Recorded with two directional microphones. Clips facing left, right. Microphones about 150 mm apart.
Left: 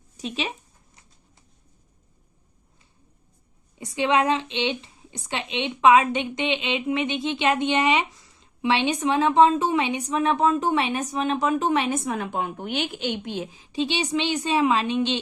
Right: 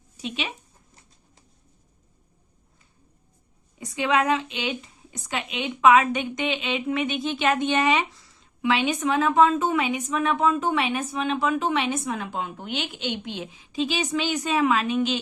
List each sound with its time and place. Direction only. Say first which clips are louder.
0.2 s a woman's voice: left 2 dB; 40° left (ahead or behind)
3.8 s a woman's voice: left 2 dB; 25° left (ahead or behind)
8.6 s a woman's voice: left 1 dB; 30° left (ahead or behind)